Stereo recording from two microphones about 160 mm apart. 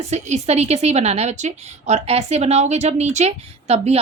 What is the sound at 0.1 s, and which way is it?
A woman's voice, 45° right (ahead or behind).